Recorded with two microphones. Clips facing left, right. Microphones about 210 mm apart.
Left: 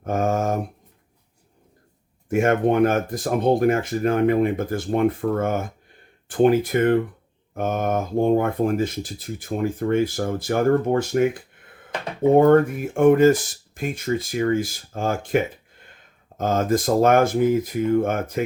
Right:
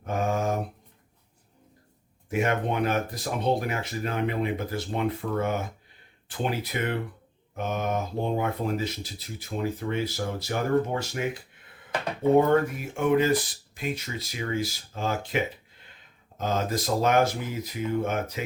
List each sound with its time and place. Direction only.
0.0 s a sound: 45° left (ahead or behind)
2.3 s speech: 50° left (ahead or behind)
12.4 s speech: 50° left (ahead or behind)